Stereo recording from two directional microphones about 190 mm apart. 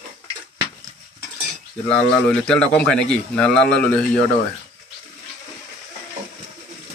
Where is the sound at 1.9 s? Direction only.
5° left (ahead or behind).